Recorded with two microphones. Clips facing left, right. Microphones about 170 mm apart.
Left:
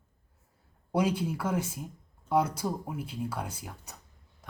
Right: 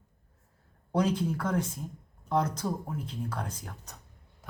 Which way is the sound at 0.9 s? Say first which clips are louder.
Even; 10° left (ahead or behind).